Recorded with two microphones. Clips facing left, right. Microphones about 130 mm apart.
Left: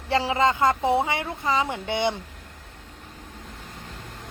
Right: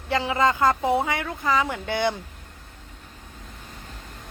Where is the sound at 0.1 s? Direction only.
30° left (ahead or behind).